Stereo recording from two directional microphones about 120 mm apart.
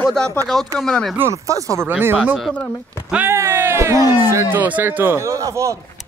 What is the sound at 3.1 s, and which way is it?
Speech, 20° right (ahead or behind).